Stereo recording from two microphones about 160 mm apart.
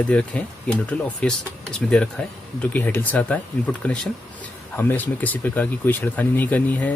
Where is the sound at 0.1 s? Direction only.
10° left (ahead or behind).